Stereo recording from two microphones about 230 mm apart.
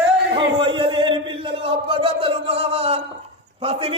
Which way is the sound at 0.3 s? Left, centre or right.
Right.